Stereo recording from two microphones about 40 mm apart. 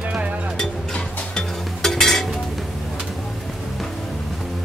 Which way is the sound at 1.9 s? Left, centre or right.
Centre.